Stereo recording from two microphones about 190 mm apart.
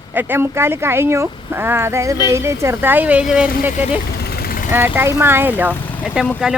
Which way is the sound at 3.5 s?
40° left (ahead or behind).